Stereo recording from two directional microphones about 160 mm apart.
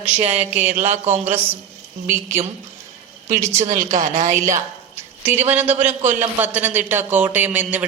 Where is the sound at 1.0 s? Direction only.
15° right (ahead or behind).